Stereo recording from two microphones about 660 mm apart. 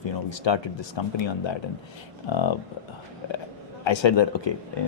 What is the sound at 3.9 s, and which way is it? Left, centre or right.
Speech, left.